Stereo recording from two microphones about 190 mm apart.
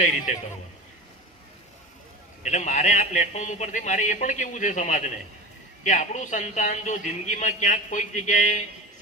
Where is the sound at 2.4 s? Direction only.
40° left (ahead or behind).